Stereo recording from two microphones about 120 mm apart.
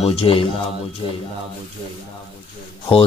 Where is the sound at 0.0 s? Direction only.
50° left (ahead or behind).